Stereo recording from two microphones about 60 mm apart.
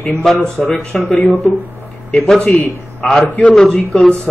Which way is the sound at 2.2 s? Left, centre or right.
Centre.